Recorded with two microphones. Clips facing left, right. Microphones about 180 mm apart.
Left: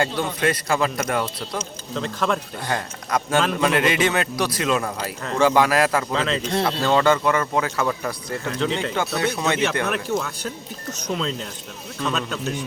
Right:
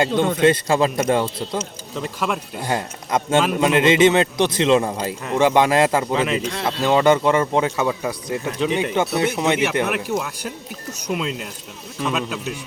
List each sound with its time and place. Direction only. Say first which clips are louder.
0.4 s a man's voice: right 4 dB; 25° right (ahead or behind)
1.5 s speech: right 2 dB; 10° right (ahead or behind)
2.6 s a man's voice: right 3 dB; 25° right (ahead or behind)